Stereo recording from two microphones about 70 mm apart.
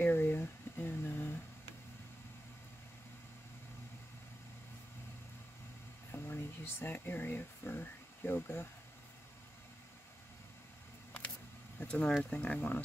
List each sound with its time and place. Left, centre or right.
0.0 s a sound: left
6.1 s speech: left
11.8 s speech: centre